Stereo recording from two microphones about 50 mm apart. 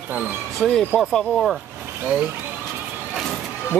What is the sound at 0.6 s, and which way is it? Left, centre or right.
Speech, centre.